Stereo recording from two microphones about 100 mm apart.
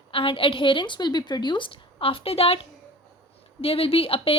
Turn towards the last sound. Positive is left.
turn(degrees=70)  # may be behind; listen again after turning